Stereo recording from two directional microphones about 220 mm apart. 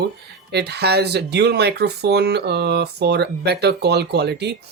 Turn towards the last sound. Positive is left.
turn(degrees=-50)  # may be behind; listen again after turning